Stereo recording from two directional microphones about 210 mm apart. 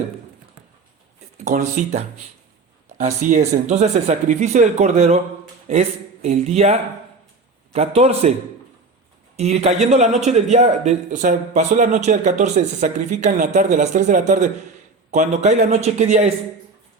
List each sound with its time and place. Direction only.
1.5 s a man's voice: 35° right (ahead or behind)
6.2 s a man's voice: 30° right (ahead or behind)
9.3 s a man's voice: 30° right (ahead or behind)